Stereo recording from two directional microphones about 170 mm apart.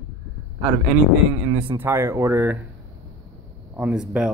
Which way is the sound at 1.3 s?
15° right (ahead or behind).